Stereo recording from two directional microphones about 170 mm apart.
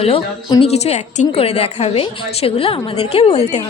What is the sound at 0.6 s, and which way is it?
A woman's voice, 40° left (ahead or behind).